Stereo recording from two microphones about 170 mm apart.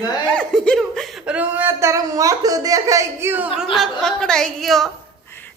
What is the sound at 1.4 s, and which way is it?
Speech, 10° right (ahead or behind).